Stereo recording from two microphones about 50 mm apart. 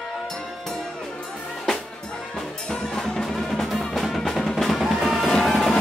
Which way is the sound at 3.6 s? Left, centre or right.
Centre.